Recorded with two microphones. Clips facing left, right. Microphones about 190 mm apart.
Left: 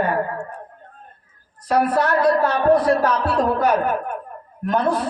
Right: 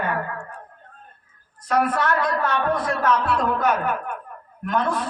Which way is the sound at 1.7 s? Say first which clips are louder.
Left 3 dB; 35° left (ahead or behind).